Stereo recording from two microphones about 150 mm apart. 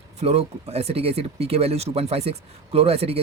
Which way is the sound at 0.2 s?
45° right (ahead or behind).